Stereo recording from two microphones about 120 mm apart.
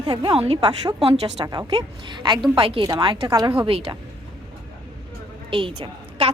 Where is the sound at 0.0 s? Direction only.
35° right (ahead or behind).